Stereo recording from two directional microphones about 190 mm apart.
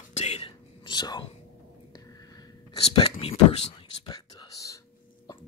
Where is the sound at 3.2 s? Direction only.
30° left (ahead or behind).